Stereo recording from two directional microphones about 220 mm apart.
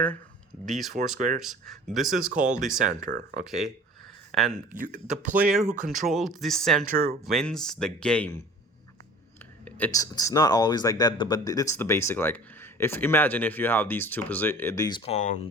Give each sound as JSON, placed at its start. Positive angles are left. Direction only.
{"t": 0.6, "sound": "speech", "side_deg": 0}
{"t": 2.8, "sound": "speech", "side_deg": -35}
{"t": 3.4, "sound": "speech", "side_deg": 0}
{"t": 4.7, "sound": "speech", "side_deg": -35}
{"t": 5.1, "sound": "speech", "side_deg": -5}
{"t": 5.6, "sound": "speech", "side_deg": -35}
{"t": 6.0, "sound": "speech", "side_deg": 0}
{"t": 6.9, "sound": "speech", "side_deg": -40}
{"t": 7.3, "sound": "speech", "side_deg": 0}
{"t": 9.6, "sound": "speech", "side_deg": 5}